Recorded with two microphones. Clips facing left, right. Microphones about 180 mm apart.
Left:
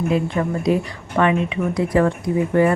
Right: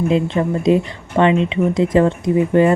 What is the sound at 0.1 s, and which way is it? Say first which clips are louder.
A woman's voice: right 3 dB; 25° right (ahead or behind).